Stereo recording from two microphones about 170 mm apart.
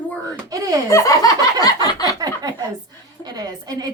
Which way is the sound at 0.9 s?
15° left (ahead or behind).